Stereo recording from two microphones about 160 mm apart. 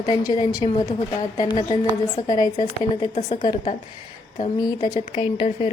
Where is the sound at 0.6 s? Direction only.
35° left (ahead or behind).